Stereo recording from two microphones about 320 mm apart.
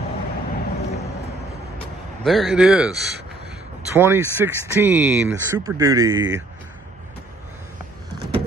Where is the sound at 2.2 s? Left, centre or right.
Centre.